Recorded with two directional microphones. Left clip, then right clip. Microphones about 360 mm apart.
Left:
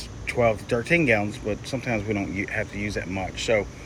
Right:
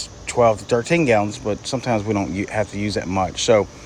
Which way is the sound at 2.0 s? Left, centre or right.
Right.